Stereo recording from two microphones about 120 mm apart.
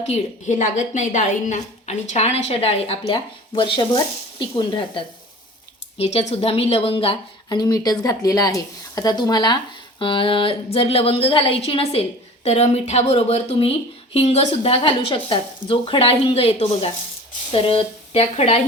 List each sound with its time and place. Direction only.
0.0 s a woman's voice: 70° left (ahead or behind); by 3.0 s 55° left (ahead or behind)
3.1 s a woman's voice: 45° left (ahead or behind)
6.0 s speech: 60° left (ahead or behind)
7.5 s speech: 35° left (ahead or behind)
10.0 s a woman's voice: 45° left (ahead or behind); by 18.6 s 60° left (ahead or behind)